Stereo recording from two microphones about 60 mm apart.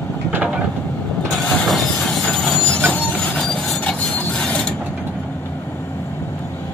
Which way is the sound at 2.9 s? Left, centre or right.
Left.